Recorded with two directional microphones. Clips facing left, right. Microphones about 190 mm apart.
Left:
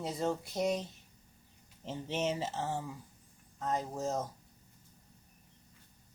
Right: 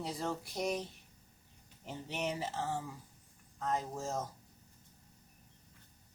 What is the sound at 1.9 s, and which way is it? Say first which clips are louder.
Speech: left 4 dB; 25° left (ahead or behind).